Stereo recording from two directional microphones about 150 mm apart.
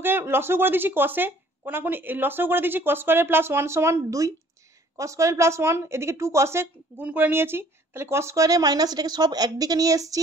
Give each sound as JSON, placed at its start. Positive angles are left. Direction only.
{"t": 0.0, "sound": "speech", "side_deg": -15}